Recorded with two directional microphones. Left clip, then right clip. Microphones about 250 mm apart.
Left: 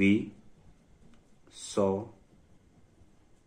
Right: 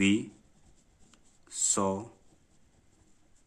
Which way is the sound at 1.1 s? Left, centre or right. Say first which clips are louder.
Right 11 dB; right.